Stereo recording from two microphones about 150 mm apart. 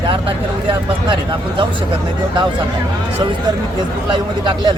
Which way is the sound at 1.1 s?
30° right (ahead or behind).